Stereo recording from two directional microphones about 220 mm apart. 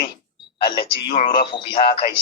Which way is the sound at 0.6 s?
25° left (ahead or behind).